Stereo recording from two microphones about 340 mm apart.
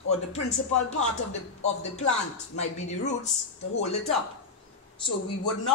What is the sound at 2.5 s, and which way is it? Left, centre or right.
Speech, centre.